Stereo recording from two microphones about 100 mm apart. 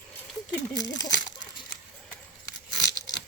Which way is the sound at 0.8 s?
40° left (ahead or behind).